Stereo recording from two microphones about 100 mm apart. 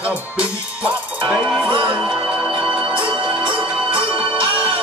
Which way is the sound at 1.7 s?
55° right (ahead or behind).